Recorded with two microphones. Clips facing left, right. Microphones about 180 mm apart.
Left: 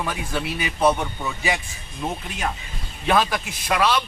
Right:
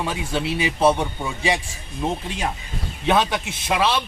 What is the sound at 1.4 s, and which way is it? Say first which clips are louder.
Speech: right 4 dB; 30° right (ahead or behind).